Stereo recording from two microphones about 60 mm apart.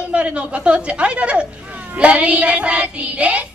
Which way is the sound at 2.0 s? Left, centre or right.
Right.